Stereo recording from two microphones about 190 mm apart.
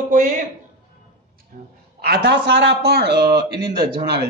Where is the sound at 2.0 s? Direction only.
60° right (ahead or behind).